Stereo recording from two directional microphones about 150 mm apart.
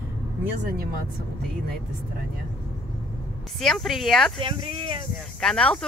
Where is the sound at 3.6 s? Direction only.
Centre (ahead or behind).